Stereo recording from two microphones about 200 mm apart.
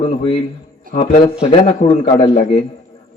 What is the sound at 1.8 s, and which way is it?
Speech, 35° left (ahead or behind).